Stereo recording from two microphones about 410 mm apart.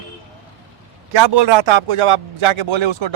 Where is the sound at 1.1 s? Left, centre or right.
Right.